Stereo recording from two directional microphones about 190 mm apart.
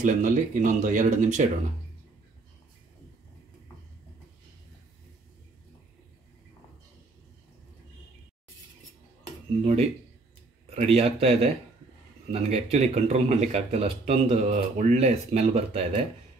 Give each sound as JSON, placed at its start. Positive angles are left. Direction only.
{"t": 0.0, "sound": "speech", "side_deg": -40}
{"t": 10.7, "sound": "speech", "side_deg": -35}